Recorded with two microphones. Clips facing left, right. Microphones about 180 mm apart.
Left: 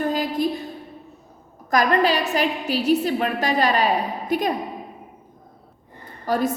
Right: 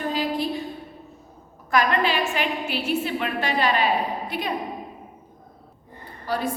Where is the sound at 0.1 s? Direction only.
45° left (ahead or behind).